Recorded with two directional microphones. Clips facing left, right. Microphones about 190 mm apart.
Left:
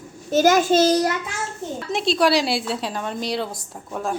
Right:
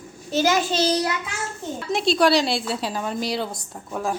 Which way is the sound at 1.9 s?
Centre (ahead or behind).